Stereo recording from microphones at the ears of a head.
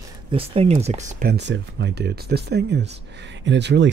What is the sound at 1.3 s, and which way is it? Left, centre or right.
Speech, right.